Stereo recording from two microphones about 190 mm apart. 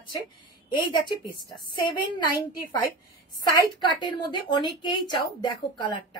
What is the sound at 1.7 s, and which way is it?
A woman's voice, 25° left (ahead or behind).